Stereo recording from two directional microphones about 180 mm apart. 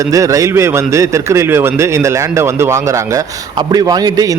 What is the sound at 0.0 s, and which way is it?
A man's voice, 20° right (ahead or behind).